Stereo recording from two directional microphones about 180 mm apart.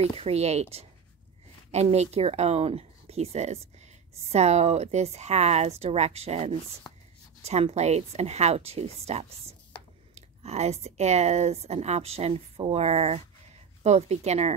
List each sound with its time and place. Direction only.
0.2 s speech: 35° right (ahead or behind)